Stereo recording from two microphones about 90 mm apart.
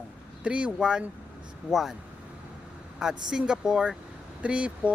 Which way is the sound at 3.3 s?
10° right (ahead or behind).